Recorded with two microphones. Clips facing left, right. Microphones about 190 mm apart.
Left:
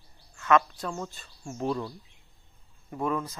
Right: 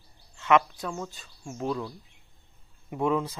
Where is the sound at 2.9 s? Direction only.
10° right (ahead or behind).